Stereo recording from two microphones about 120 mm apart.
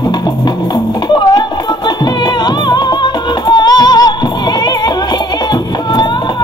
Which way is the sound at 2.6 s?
35° left (ahead or behind).